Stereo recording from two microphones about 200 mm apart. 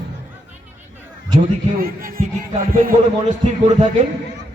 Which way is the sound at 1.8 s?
45° right (ahead or behind).